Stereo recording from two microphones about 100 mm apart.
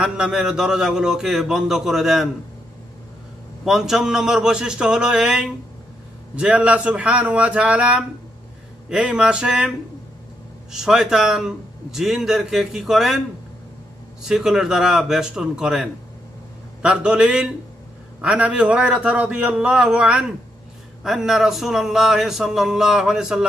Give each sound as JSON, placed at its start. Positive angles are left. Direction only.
{"t": 0.0, "sound": "a man's voice", "side_deg": -10}
{"t": 3.6, "sound": "a man's voice", "side_deg": -5}
{"t": 14.2, "sound": "a man's voice", "side_deg": -5}